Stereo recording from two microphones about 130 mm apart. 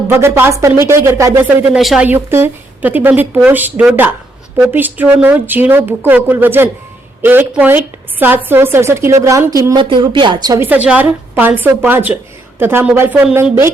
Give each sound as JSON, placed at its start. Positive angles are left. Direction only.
{"t": 0.1, "sound": "speech", "side_deg": -15}
{"t": 1.8, "sound": "a woman's voice", "side_deg": 0}
{"t": 2.0, "sound": "a woman's voice", "side_deg": -20}
{"t": 10.6, "sound": "a woman's voice", "side_deg": -10}